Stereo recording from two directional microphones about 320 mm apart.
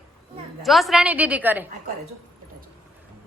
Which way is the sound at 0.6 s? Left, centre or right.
Centre.